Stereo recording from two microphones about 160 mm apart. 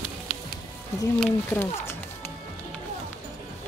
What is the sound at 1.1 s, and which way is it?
Speech, 10° left (ahead or behind).